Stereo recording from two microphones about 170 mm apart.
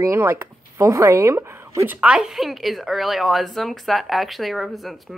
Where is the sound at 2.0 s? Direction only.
5° right (ahead or behind).